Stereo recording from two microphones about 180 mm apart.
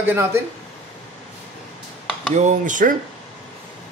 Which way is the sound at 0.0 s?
15° right (ahead or behind).